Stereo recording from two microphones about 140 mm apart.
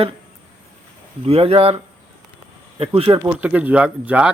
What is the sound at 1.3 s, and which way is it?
Speech, 45° right (ahead or behind).